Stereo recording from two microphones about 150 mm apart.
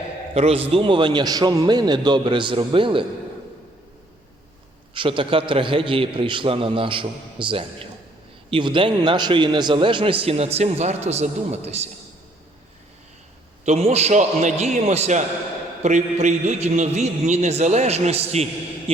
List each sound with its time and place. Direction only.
0.3 s a man's voice: 40° right (ahead or behind)
4.9 s a man's voice: 35° right (ahead or behind)
13.7 s a man's voice: 45° right (ahead or behind)